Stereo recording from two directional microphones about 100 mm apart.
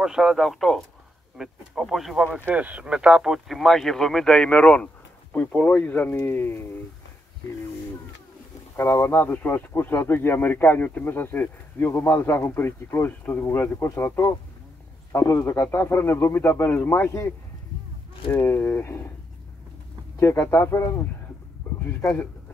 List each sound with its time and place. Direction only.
0.0 s speech: 5° right (ahead or behind)
2.3 s speech: 15° right (ahead or behind); by 6.8 s 25° left (ahead or behind)
8.7 s speech: 25° left (ahead or behind)
18.5 s speech: 20° left (ahead or behind)
20.2 s speech: 25° left (ahead or behind)